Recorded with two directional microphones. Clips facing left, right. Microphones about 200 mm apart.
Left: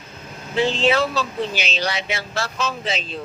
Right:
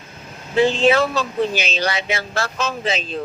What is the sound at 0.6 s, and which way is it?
Speech, 50° right (ahead or behind).